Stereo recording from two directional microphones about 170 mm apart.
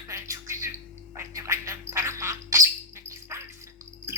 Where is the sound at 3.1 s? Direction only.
15° right (ahead or behind).